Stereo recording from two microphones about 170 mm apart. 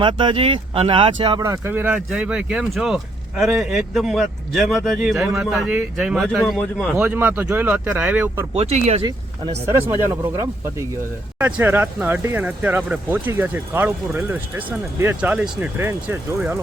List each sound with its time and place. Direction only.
0.0 s speech: 30° right (ahead or behind)
1.4 s speech: 15° right (ahead or behind); by 6.9 s centre (ahead or behind)
6.9 s speech: 10° right (ahead or behind)
8.5 s speech: 40° right (ahead or behind)
10.1 s speech: 15° right (ahead or behind)